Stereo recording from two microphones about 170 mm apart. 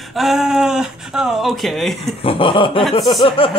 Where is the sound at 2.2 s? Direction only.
30° left (ahead or behind).